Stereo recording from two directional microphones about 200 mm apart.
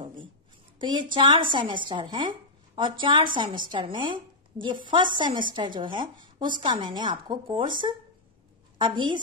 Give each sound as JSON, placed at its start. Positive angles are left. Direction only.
{"t": 0.7, "sound": "a woman's voice", "side_deg": -25}